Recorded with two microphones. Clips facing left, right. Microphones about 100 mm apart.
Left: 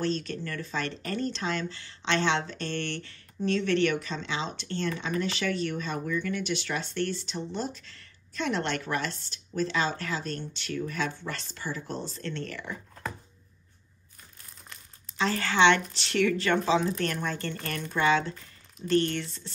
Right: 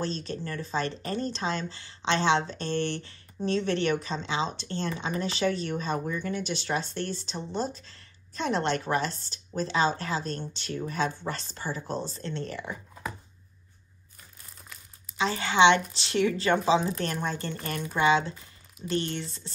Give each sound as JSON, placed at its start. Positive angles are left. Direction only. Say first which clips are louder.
{"t": 0.0, "sound": "speech", "louder": "left 2 dB", "side_deg": -30}
{"t": 14.7, "sound": "speech", "louder": "even", "side_deg": -15}
{"t": 17.6, "sound": "speech", "louder": "right 3 dB", "side_deg": -15}
{"t": 18.3, "sound": "a sound", "louder": "left 1 dB", "side_deg": -10}
{"t": 18.9, "sound": "speech", "louder": "left 5 dB", "side_deg": -25}